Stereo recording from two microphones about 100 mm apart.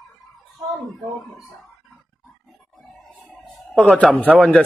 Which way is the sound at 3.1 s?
15° left (ahead or behind).